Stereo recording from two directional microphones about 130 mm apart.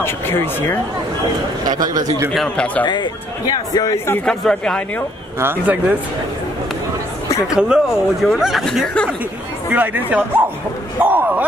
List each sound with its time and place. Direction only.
0.0 s speech: 20° left (ahead or behind)
1.6 s a man's voice: 30° right (ahead or behind)
2.3 s speech: 5° left (ahead or behind)
2.8 s a man's voice: 35° left (ahead or behind)
4.2 s speech: 5° left (ahead or behind)
5.4 s speech: 15° right (ahead or behind)
7.5 s speech: 5° right (ahead or behind)
9.7 s speech: 15° right (ahead or behind)